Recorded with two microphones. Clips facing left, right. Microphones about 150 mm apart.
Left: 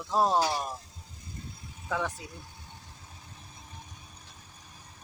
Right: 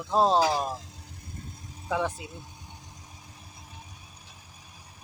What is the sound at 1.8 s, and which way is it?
Speech, 15° right (ahead or behind).